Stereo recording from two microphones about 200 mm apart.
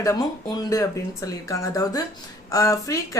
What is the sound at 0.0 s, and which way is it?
Speech, 20° left (ahead or behind).